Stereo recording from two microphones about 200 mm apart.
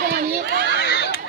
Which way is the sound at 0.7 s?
55° left (ahead or behind).